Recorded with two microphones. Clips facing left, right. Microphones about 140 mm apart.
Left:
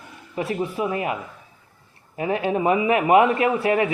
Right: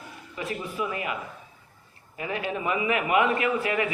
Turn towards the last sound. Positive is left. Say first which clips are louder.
# left 6 dB
turn(degrees=30)  # may be behind; listen again after turning